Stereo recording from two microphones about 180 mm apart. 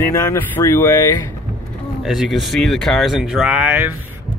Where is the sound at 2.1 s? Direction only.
Centre (ahead or behind).